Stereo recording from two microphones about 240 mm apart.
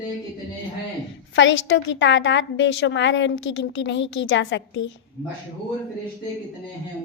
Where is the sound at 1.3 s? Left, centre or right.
Left.